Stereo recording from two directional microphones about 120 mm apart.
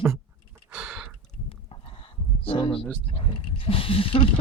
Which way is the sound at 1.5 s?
50° left (ahead or behind).